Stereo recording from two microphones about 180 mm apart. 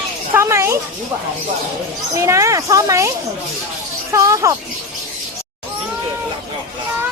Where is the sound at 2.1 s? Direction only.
15° right (ahead or behind).